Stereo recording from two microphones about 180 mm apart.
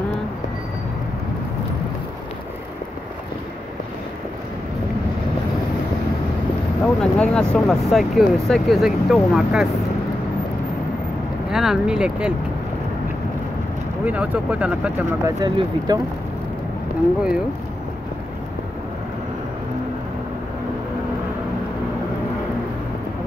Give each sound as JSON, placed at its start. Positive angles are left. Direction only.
{"t": 6.8, "sound": "speech", "side_deg": 5}
{"t": 11.5, "sound": "speech", "side_deg": 0}
{"t": 14.0, "sound": "speech", "side_deg": -10}
{"t": 15.2, "sound": "speech", "side_deg": -20}